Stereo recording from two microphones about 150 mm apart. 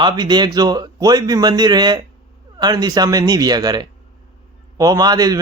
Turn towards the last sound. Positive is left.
turn(degrees=-25)  # may be behind; listen again after turning